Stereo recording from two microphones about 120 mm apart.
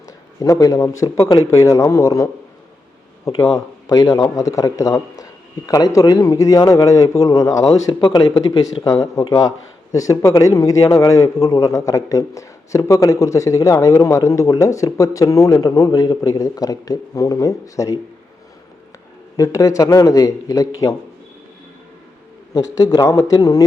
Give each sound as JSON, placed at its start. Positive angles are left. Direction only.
{"t": 0.3, "sound": "a man's voice", "side_deg": 25}
{"t": 19.4, "sound": "a man's voice", "side_deg": 25}
{"t": 22.5, "sound": "a man's voice", "side_deg": 30}